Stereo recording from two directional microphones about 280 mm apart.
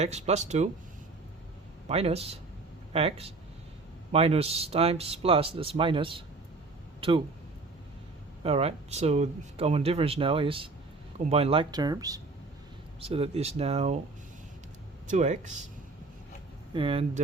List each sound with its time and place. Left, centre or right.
0.0 s speech: right
1.9 s speech: right
8.4 s speech: right
15.0 s speech: right
16.7 s speech: centre